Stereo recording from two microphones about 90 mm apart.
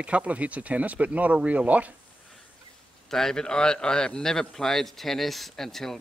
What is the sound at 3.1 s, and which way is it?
A man's voice, 5° left (ahead or behind).